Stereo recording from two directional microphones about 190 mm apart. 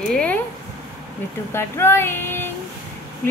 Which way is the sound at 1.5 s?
15° left (ahead or behind).